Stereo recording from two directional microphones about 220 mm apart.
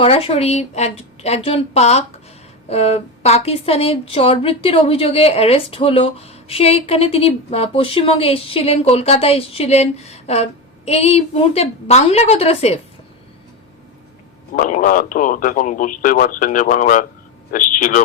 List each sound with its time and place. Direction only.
0.0 s a woman's voice: 25° left (ahead or behind)
14.5 s speech: 35° left (ahead or behind)